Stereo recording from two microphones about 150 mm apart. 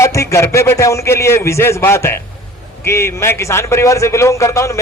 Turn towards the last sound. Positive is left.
turn(degrees=20)  # may be behind; listen again after turning